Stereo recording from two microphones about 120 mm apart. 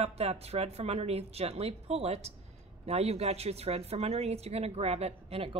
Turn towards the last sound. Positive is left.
turn(degrees=-55)  # may be behind; listen again after turning